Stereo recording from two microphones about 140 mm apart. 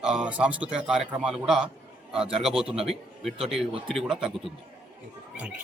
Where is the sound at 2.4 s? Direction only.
Centre (ahead or behind).